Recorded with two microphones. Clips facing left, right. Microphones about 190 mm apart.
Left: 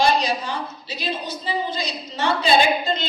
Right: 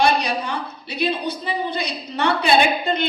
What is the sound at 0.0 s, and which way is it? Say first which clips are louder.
A woman's voice: right 1 dB; 60° right (ahead or behind).